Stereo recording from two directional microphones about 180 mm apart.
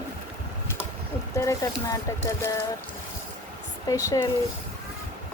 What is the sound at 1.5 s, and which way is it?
Speech, 20° left (ahead or behind).